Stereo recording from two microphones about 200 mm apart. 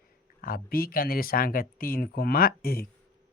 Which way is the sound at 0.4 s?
50° left (ahead or behind).